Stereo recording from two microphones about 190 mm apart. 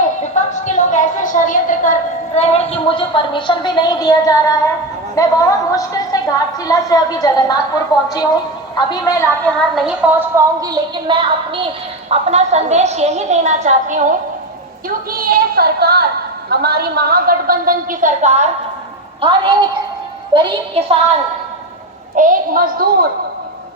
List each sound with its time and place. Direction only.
0.0 s a woman's voice: 40° left (ahead or behind); by 14.1 s 40° right (ahead or behind)
14.8 s a woman's voice: 50° right (ahead or behind)
20.3 s a woman's voice: 30° right (ahead or behind)
22.1 s a woman's voice: 45° right (ahead or behind)